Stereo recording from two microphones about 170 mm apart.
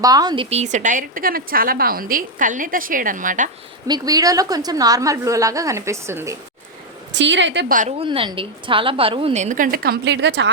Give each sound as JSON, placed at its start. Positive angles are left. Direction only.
{"t": 0.0, "sound": "a woman's voice", "side_deg": -20}
{"t": 0.5, "sound": "a woman's voice", "side_deg": -45}
{"t": 3.8, "sound": "a woman's voice", "side_deg": -25}
{"t": 7.1, "sound": "a woman's voice", "side_deg": -90}
{"t": 7.7, "sound": "a woman's voice", "side_deg": -50}
{"t": 7.9, "sound": "a woman's voice", "side_deg": -30}